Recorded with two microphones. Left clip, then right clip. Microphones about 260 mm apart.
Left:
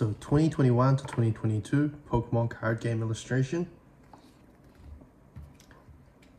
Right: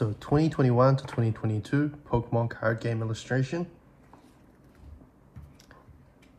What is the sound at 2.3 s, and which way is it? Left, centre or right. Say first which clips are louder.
Speech: right 2 dB; centre.